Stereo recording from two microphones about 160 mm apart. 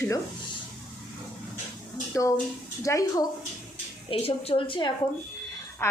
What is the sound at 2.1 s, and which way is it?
A woman's voice, 15° left (ahead or behind).